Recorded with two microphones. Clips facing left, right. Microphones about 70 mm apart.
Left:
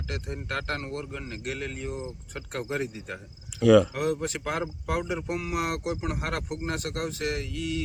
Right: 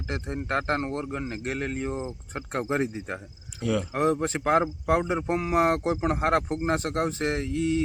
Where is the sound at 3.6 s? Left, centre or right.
Left.